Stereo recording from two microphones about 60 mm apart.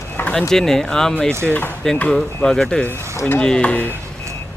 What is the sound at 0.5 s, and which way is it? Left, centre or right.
Speech, centre.